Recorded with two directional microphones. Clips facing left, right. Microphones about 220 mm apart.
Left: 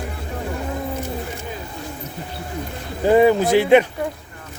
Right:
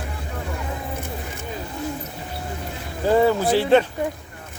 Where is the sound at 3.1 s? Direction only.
15° left (ahead or behind).